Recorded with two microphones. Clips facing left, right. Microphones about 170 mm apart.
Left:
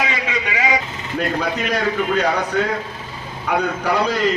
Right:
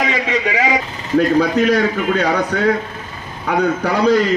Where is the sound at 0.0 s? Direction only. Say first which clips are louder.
Right 5 dB; 35° right (ahead or behind).